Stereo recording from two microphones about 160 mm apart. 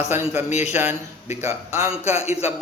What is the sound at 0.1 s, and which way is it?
A man's voice, 15° right (ahead or behind).